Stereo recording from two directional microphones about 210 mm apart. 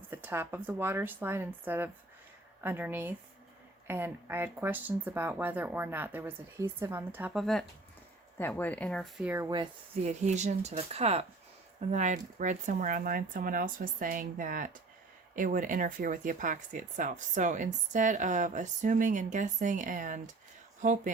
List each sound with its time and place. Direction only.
0.1 s speech: 10° right (ahead or behind)
9.2 s speech: 10° right (ahead or behind)
10.0 s speech: 35° right (ahead or behind)